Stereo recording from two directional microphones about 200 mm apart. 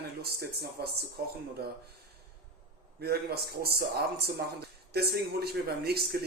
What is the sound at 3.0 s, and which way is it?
Speech, 50° right (ahead or behind).